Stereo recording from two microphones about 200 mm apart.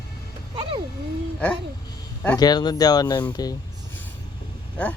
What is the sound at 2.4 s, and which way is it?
Speech, 20° left (ahead or behind).